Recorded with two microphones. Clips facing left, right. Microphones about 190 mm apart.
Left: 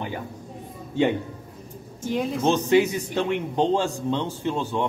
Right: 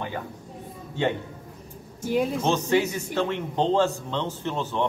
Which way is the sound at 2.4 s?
15° left (ahead or behind).